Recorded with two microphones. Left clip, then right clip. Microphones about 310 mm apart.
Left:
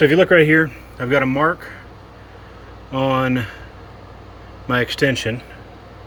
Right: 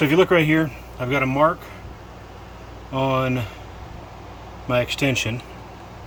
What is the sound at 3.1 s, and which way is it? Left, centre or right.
Speech, right.